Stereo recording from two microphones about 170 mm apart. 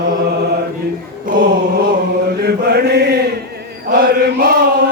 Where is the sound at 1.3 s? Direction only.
55° right (ahead or behind).